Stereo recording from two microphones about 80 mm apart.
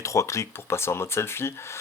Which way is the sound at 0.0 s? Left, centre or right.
Left.